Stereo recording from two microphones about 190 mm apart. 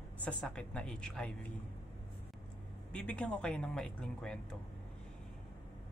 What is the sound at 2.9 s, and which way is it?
Speech, 5° left (ahead or behind).